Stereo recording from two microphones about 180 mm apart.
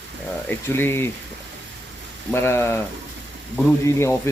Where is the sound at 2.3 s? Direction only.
15° left (ahead or behind).